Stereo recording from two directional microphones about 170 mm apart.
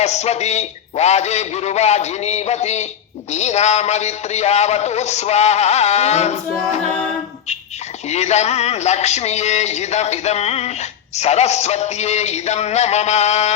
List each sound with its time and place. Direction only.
0.0 s a man's voice: 40° left (ahead or behind)
8.1 s a man's voice: 40° left (ahead or behind)